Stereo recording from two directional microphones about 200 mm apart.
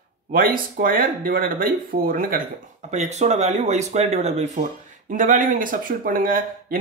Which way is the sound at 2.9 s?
35° right (ahead or behind).